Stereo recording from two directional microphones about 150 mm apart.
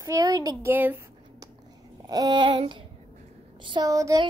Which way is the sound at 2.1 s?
25° right (ahead or behind).